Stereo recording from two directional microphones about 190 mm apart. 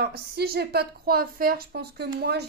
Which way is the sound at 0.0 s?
55° right (ahead or behind).